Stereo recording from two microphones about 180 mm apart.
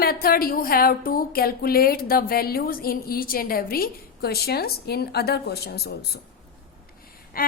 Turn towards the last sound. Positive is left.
turn(degrees=55)  # may be behind; listen again after turning